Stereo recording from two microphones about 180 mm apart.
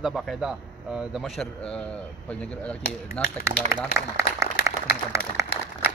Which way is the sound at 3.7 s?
15° right (ahead or behind).